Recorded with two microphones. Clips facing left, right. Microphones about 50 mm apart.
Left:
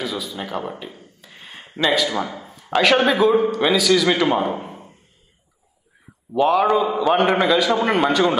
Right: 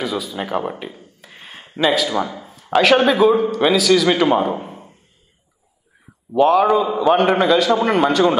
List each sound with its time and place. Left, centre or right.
0.0 s a man's voice: centre
0.4 s speech: centre
0.9 s a sound: centre
1.9 s a man's voice: centre
6.3 s a man's voice: centre